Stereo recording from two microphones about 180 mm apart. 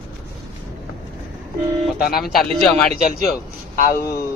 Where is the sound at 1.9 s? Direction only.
60° left (ahead or behind).